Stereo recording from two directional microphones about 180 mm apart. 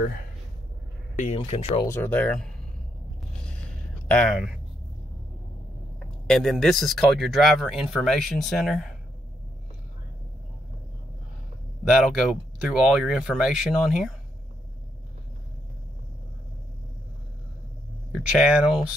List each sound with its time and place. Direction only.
1.2 s speech: 35° left (ahead or behind)
1.9 s speech: 10° left (ahead or behind)
4.1 s speech: centre (ahead or behind)
6.2 s speech: centre (ahead or behind)
11.9 s speech: 5° right (ahead or behind)
18.1 s speech: 5° right (ahead or behind)